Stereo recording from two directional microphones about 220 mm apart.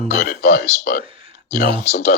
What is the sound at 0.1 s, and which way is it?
Speech, 45° left (ahead or behind).